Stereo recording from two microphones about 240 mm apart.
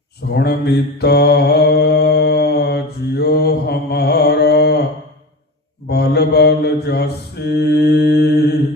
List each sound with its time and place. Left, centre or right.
0.3 s mantra: left
5.9 s mantra: left